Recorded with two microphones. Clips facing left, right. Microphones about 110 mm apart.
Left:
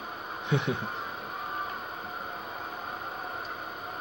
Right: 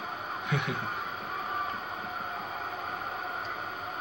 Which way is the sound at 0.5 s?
30° left (ahead or behind).